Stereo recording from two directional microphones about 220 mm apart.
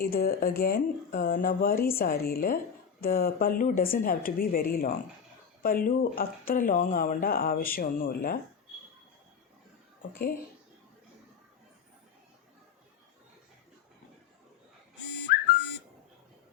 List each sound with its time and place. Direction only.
0.0 s speech: 45° left (ahead or behind)
10.0 s speech: 40° left (ahead or behind)
15.3 s dog: 45° left (ahead or behind)